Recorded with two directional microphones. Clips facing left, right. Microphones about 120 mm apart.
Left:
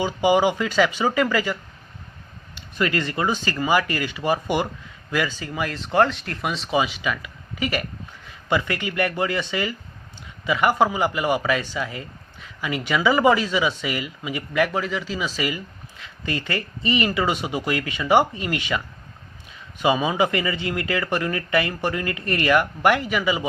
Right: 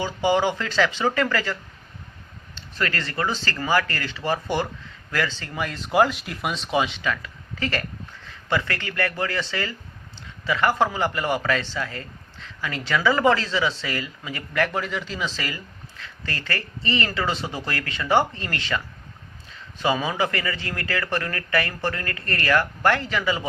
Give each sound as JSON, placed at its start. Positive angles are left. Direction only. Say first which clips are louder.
{"t": 0.0, "sound": "speech", "louder": "left 3 dB", "side_deg": 15}
{"t": 2.6, "sound": "speech", "louder": "left 4 dB", "side_deg": 15}